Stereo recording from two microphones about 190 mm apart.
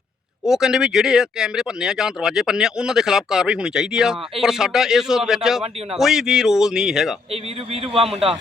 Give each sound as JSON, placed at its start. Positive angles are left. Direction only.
{"t": 0.4, "sound": "speech", "side_deg": -5}
{"t": 7.7, "sound": "a man's voice", "side_deg": -30}